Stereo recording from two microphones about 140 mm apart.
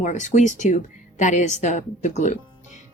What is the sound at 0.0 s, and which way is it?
Speech, 60° left (ahead or behind).